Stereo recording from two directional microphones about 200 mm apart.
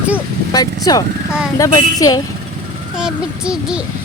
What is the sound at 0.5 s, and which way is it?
A woman's voice, 20° left (ahead or behind).